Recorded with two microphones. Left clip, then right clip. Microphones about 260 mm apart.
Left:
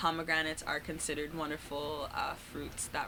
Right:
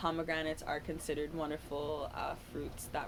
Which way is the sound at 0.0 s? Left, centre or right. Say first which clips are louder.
Left 4 dB; left.